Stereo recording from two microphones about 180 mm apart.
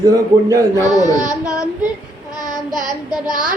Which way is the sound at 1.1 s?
20° left (ahead or behind).